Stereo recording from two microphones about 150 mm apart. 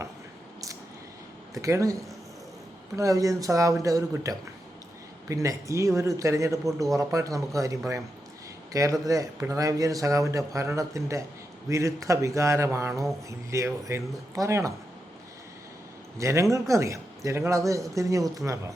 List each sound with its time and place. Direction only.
1.5 s a man's voice: 20° right (ahead or behind)
16.1 s a man's voice: 20° right (ahead or behind)